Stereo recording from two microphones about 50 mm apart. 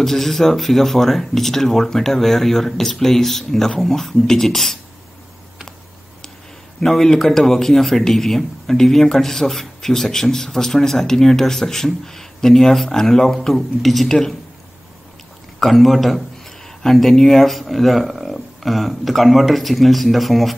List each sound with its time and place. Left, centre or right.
0.0 s speech: centre
6.8 s speech: centre
15.6 s speech: centre